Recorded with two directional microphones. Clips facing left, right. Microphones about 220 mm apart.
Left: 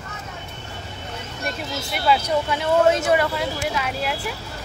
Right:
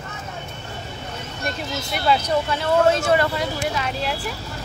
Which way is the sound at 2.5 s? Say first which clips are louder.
Left 1 dB; 20° left (ahead or behind).